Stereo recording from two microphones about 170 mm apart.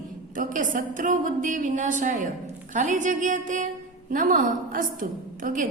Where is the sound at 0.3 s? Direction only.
50° right (ahead or behind).